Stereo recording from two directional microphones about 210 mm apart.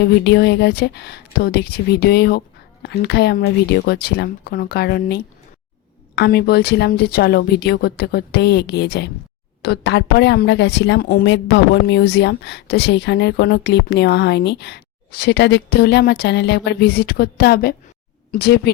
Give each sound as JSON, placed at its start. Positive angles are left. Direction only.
{"t": 0.0, "sound": "speech", "side_deg": 55}